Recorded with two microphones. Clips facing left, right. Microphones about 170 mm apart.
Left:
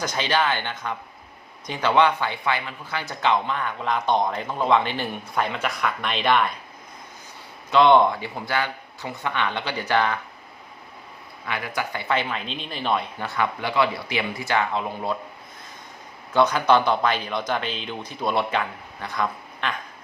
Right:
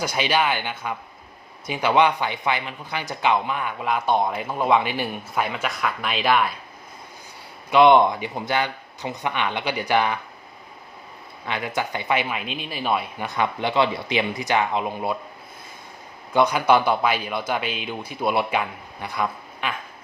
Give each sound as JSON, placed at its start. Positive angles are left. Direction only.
{"t": 0.0, "sound": "speech", "side_deg": -10}
{"t": 7.7, "sound": "speech", "side_deg": -15}
{"t": 11.4, "sound": "speech", "side_deg": -25}
{"t": 16.3, "sound": "speech", "side_deg": -10}